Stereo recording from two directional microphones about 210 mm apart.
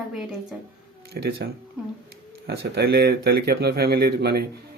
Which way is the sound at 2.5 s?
50° right (ahead or behind).